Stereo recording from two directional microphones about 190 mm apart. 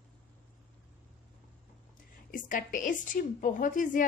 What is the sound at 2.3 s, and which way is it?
A woman's voice, 45° left (ahead or behind).